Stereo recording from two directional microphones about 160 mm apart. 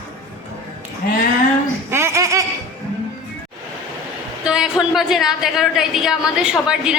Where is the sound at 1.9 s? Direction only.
15° right (ahead or behind).